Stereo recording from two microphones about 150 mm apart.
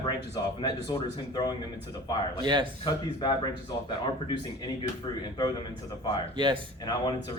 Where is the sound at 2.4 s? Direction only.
30° right (ahead or behind).